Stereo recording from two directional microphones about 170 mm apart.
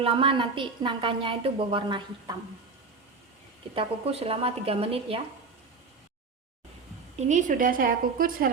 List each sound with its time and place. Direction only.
0.0 s a woman's voice: 30° right (ahead or behind)
3.8 s a woman's voice: 35° right (ahead or behind)
7.2 s a woman's voice: 45° right (ahead or behind)